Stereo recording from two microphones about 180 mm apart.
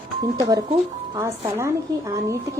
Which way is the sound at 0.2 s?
20° right (ahead or behind).